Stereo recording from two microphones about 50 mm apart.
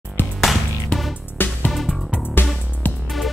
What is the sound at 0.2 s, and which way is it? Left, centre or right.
Music, left.